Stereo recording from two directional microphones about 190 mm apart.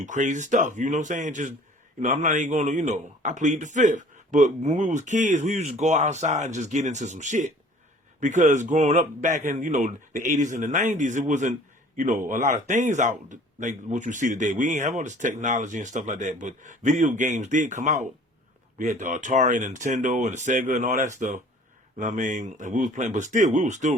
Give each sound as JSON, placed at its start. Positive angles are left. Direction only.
{"t": 0.0, "sound": "speech", "side_deg": -40}